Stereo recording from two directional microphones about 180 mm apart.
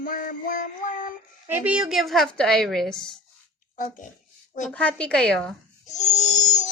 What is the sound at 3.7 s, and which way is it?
Speech, 50° left (ahead or behind).